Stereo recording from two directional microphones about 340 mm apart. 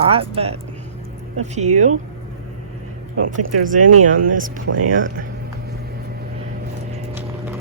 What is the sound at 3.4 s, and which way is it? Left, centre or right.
Speech, right.